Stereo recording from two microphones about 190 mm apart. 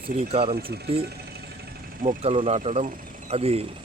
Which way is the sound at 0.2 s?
30° right (ahead or behind).